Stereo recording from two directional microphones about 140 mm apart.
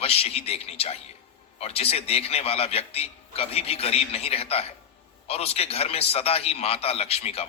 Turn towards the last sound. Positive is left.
turn(degrees=45)  # may be behind; listen again after turning